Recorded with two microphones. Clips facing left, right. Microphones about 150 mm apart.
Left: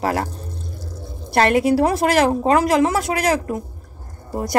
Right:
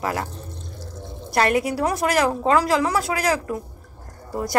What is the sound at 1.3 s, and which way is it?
A woman's voice, 25° left (ahead or behind).